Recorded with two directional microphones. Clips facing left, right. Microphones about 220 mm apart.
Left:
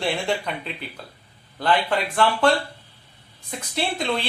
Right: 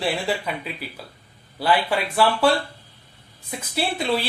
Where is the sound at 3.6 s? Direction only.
5° right (ahead or behind).